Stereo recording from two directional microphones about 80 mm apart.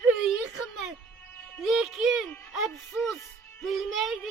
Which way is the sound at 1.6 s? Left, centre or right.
Centre.